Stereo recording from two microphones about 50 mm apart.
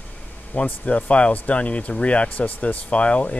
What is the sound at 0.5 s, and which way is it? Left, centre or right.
Speech, left.